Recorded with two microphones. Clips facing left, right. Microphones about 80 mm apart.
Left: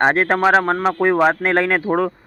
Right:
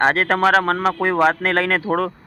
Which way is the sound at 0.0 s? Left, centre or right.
Centre.